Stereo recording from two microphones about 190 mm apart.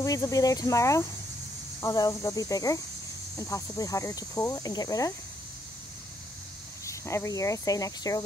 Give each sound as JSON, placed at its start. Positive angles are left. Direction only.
{"t": 0.0, "sound": "speech", "side_deg": 20}
{"t": 6.9, "sound": "speech", "side_deg": 15}